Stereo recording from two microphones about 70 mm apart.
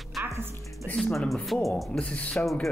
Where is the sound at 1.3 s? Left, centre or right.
Centre.